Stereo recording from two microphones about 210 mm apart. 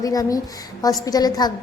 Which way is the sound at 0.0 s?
15° left (ahead or behind).